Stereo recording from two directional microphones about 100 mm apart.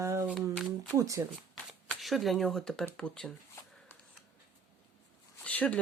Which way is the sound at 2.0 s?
Centre (ahead or behind).